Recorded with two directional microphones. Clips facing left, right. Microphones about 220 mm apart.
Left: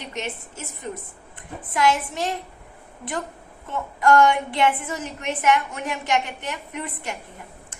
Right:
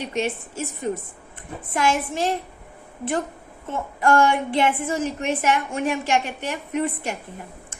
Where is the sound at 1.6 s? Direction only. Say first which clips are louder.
Left 1 dB; 30° right (ahead or behind).